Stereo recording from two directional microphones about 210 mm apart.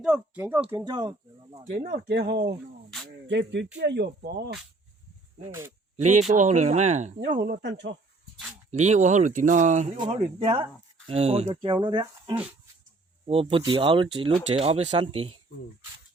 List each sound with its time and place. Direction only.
0.0 s speech: 5° right (ahead or behind)
1.7 s speech: 40° right (ahead or behind)
3.2 s speech: 60° right (ahead or behind)
6.0 s speech: 35° right (ahead or behind)
7.4 s speech: 50° right (ahead or behind)
8.8 s speech: 35° right (ahead or behind)
10.0 s speech: 25° right (ahead or behind)